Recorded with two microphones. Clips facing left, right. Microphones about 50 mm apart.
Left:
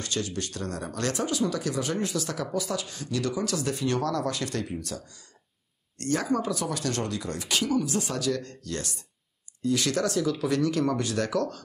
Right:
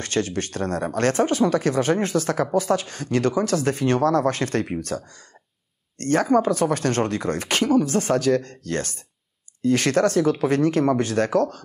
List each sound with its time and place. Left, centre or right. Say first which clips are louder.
0.0 s speech: right 7 dB; right